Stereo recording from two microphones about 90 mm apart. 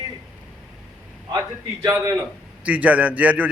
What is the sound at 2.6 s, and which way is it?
Speech, 15° right (ahead or behind).